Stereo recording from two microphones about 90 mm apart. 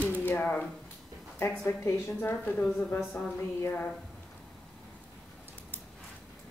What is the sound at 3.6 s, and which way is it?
Speech, 20° left (ahead or behind).